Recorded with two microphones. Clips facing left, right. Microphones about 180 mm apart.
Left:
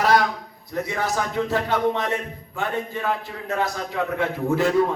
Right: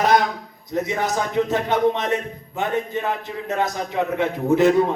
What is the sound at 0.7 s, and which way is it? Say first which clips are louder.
Speech: right 3 dB; 20° right (ahead or behind).